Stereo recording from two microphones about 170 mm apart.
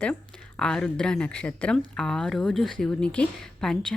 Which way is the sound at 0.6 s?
5° left (ahead or behind).